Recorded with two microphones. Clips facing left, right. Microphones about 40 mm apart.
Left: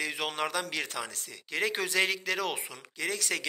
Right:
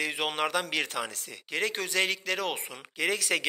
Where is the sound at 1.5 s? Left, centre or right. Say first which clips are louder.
Even; centre.